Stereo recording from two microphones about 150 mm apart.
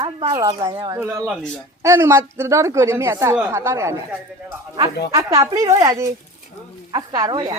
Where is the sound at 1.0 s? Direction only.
15° right (ahead or behind).